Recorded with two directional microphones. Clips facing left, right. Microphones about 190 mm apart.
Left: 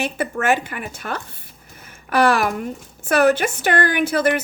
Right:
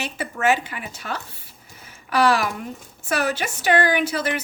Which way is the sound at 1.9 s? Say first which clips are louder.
Left 2 dB; 55° left (ahead or behind).